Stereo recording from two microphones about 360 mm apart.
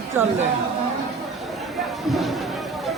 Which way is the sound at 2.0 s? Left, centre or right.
Centre.